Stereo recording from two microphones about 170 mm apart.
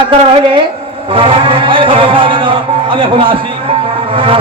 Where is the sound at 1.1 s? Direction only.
30° right (ahead or behind).